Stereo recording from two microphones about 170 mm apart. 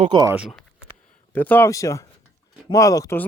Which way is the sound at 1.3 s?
10° left (ahead or behind).